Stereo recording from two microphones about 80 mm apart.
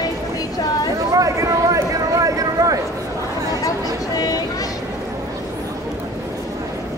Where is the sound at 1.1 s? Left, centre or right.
Right.